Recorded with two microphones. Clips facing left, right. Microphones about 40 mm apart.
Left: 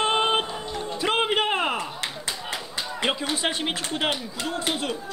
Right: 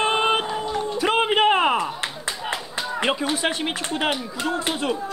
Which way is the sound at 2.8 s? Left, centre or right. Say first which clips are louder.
Right 3 dB; right.